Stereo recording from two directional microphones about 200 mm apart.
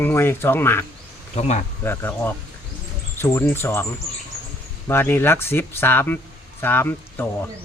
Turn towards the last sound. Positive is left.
turn(degrees=10)  # may be behind; listen again after turning